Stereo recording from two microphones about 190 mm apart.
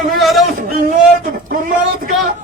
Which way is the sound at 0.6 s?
45° right (ahead or behind).